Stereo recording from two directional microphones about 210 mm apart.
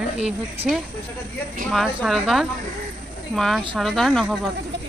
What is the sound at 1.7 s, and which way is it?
Speech, centre (ahead or behind).